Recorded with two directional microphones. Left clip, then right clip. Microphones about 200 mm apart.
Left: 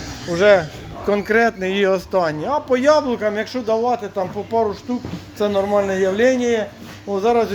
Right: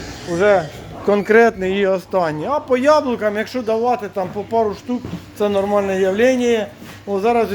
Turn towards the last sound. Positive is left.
turn(degrees=-10)  # may be behind; listen again after turning